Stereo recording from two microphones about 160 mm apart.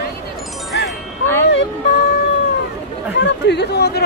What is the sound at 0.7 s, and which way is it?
Wind chime, 90° left.